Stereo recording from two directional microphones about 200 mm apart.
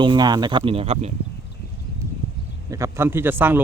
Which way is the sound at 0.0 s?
20° right (ahead or behind).